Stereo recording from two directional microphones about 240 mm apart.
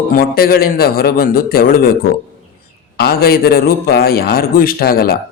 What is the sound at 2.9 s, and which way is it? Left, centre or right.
Speech, left.